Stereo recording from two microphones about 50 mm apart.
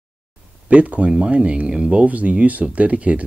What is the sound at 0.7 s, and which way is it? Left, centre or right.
Speech, right.